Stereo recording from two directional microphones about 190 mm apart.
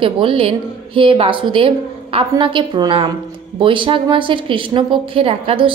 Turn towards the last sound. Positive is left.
turn(degrees=-30)  # may be behind; listen again after turning